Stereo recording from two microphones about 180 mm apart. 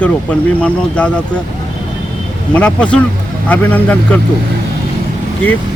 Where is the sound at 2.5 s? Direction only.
5° left (ahead or behind).